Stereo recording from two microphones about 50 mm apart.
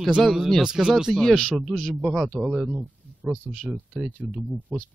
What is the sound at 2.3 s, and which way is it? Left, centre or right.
Speech, right.